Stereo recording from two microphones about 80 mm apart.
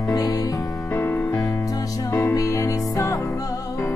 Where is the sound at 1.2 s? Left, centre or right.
Left.